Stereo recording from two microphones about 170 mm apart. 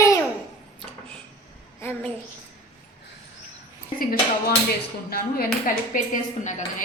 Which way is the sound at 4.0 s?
60° left (ahead or behind).